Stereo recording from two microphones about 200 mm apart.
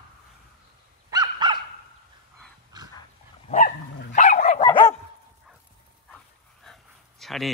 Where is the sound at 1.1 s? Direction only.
20° right (ahead or behind).